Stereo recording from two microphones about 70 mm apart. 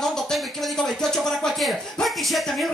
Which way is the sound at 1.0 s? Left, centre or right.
Centre.